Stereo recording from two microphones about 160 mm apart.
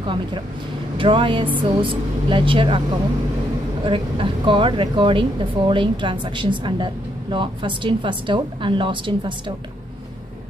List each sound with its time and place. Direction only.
0.0 s speech: 30° right (ahead or behind)
3.8 s speech: 30° right (ahead or behind)